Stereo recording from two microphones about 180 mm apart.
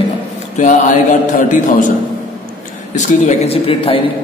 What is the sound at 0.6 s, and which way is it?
A man's voice, 45° left (ahead or behind).